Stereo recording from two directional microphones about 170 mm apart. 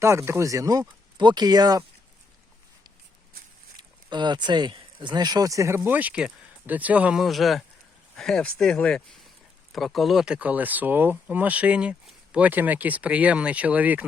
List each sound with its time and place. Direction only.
0.0 s speech: 15° right (ahead or behind)
3.8 s speech: 25° right (ahead or behind); by 14.0 s 10° right (ahead or behind)